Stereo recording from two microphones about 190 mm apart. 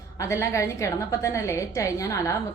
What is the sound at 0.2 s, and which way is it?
A woman's voice, 15° left (ahead or behind).